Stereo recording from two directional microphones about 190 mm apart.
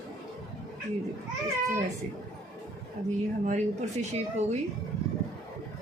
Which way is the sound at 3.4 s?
35° right (ahead or behind).